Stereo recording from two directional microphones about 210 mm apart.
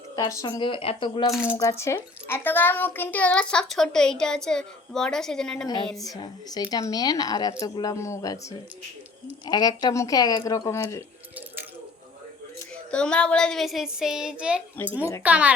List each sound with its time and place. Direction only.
0.2 s speech: 15° left (ahead or behind)
1.3 s a woman's voice: 5° right (ahead or behind)
1.5 s a woman's voice: 15° left (ahead or behind)
6.0 s a woman's voice: 20° left (ahead or behind)
12.9 s a woman's voice: 5° left (ahead or behind)